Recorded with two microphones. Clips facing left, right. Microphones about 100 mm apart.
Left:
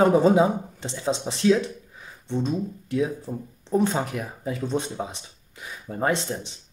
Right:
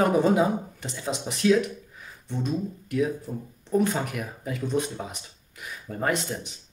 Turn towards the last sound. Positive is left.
turn(degrees=25)  # may be behind; listen again after turning